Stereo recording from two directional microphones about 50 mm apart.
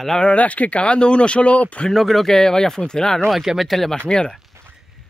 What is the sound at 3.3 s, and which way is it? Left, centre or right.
Speech, centre.